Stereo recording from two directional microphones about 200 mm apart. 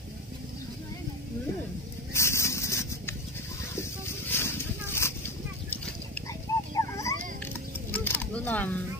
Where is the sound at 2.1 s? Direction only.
15° left (ahead or behind).